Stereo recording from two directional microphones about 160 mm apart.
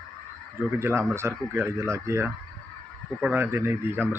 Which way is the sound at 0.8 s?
15° right (ahead or behind).